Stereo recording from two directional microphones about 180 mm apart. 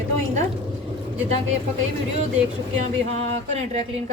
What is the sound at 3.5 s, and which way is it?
Speech, 40° right (ahead or behind).